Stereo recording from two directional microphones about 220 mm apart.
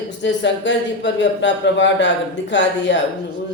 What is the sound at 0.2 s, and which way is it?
Speech, 55° left (ahead or behind).